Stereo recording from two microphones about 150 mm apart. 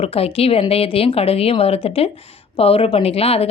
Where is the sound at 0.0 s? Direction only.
40° left (ahead or behind).